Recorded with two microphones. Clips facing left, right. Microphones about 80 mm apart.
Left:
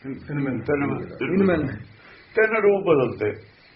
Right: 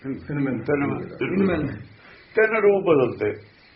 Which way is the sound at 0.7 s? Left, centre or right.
Centre.